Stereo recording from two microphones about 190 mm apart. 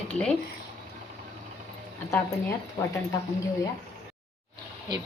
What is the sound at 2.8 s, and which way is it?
Speech, 15° left (ahead or behind).